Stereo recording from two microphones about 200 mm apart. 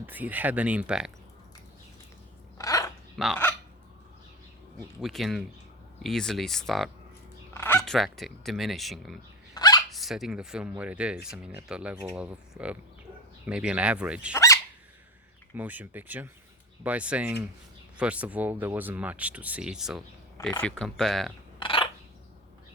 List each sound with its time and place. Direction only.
0.0 s speech: 10° right (ahead or behind)
2.6 s a sound: 15° left (ahead or behind)
3.2 s speech: centre (ahead or behind)
4.9 s speech: centre (ahead or behind)
9.6 s a sound: 20° left (ahead or behind)
9.9 s speech: centre (ahead or behind)
14.3 s dog: 15° left (ahead or behind)
15.5 s speech: 10° right (ahead or behind)
21.6 s a sound: 25° left (ahead or behind)